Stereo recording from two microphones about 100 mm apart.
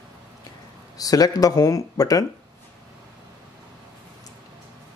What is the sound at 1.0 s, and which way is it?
Speech, 40° left (ahead or behind).